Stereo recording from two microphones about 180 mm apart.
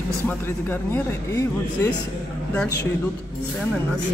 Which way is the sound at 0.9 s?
15° left (ahead or behind).